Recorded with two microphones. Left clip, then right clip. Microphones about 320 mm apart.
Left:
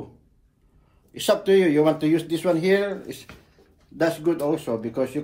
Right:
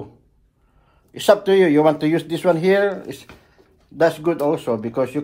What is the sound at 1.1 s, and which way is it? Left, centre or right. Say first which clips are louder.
Speech: right 5 dB; right.